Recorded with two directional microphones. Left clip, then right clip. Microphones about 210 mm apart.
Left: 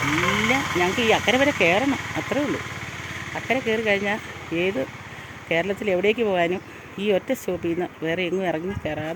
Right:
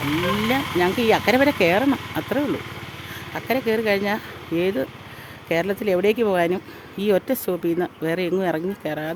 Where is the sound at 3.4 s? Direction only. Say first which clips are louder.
Right 1 dB; 20° right (ahead or behind).